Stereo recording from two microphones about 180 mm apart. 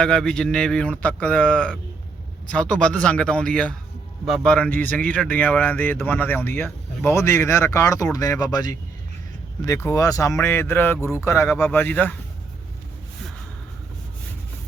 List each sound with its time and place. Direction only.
0.0 s speech: 5° left (ahead or behind)